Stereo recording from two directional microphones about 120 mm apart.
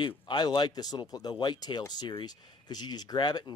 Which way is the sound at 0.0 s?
45° left (ahead or behind).